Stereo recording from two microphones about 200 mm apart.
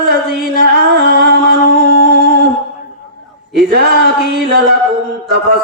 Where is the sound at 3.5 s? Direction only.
50° right (ahead or behind).